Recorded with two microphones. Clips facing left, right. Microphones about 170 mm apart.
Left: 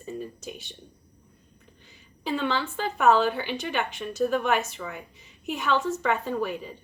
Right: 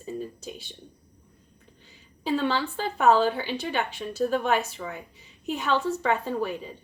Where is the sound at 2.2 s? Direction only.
35° right (ahead or behind).